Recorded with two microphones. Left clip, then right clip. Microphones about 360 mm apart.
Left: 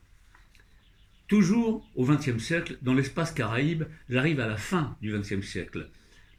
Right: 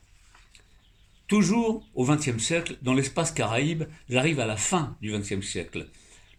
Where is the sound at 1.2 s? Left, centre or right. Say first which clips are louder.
Right 2 dB; centre.